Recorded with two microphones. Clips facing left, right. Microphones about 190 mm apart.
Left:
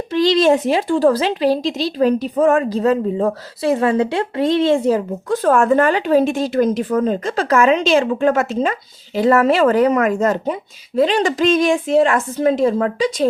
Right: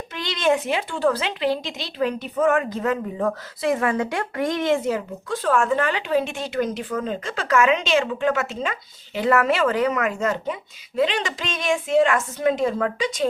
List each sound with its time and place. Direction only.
0.1 s a woman's voice: 35° left (ahead or behind)